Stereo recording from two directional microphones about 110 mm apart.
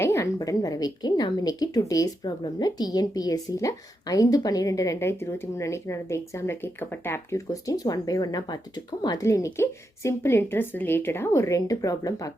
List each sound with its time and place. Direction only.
0.0 s a woman's voice: 25° left (ahead or behind)
9.2 s speech: 25° left (ahead or behind)